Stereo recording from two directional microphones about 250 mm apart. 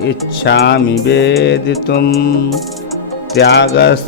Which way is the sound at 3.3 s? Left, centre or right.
Left.